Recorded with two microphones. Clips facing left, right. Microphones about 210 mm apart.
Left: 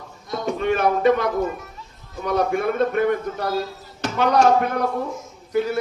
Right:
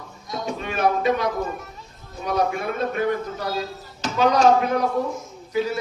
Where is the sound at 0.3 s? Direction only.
55° left (ahead or behind).